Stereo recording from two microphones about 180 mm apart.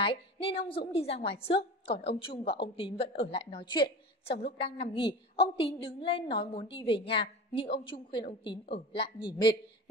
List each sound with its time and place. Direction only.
0.0 s a woman's voice: 30° left (ahead or behind)
2.4 s speech: 70° left (ahead or behind)
2.7 s a woman's voice: 30° left (ahead or behind)
4.3 s a woman's voice: 65° left (ahead or behind)
4.6 s a woman's voice: 30° left (ahead or behind)